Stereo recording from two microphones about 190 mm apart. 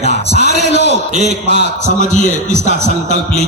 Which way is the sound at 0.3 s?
35° right (ahead or behind).